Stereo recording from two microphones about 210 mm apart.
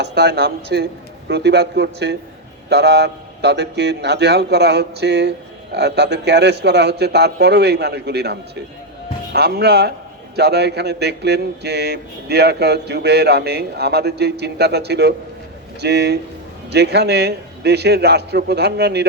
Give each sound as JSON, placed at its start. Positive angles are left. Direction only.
{"t": 0.0, "sound": "a man's voice", "side_deg": -50}